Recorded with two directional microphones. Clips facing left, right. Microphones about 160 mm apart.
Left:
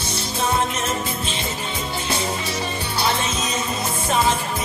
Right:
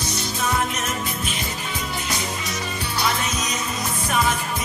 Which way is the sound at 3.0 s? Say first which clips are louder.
Left 2 dB; 30° left (ahead or behind).